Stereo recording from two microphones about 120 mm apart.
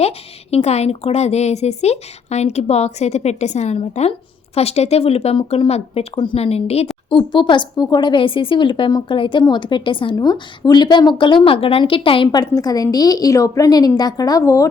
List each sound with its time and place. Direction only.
0.5 s speech: 60° left (ahead or behind)
3.8 s speech: 65° left (ahead or behind)
7.1 s a woman's voice: 45° left (ahead or behind); by 14.7 s 30° left (ahead or behind)